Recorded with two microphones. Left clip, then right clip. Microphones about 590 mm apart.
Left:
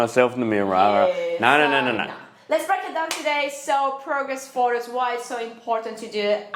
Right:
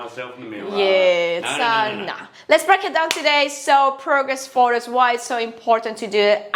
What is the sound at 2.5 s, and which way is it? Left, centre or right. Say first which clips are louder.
A woman's voice: right 7 dB; right.